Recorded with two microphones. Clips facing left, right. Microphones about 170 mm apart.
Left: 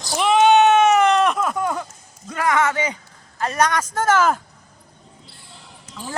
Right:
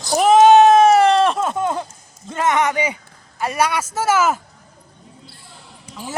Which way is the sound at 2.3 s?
25° right (ahead or behind).